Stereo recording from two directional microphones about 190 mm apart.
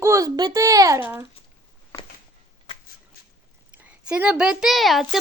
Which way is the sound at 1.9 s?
15° left (ahead or behind).